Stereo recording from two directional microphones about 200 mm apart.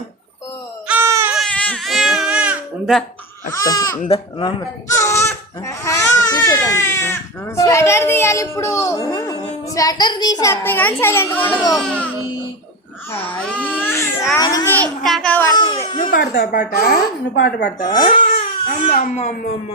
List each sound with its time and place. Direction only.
0.9 s baby cry: 10° right (ahead or behind)
1.3 s baby cry: 5° left (ahead or behind)
3.5 s a child's voice: 15° left (ahead or behind)
14.8 s a child's voice: 5° left (ahead or behind)
15.5 s speech: 20° left (ahead or behind)
16.0 s speech: 45° left (ahead or behind)
16.3 s speech: 60° left (ahead or behind)
16.6 s speech: 50° left (ahead or behind)
18.2 s crying: 35° left (ahead or behind)